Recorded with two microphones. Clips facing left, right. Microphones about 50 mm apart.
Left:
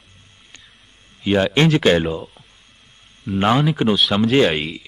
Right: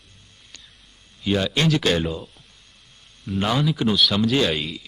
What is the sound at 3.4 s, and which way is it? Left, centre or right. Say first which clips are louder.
A man's voice: left 5 dB; left.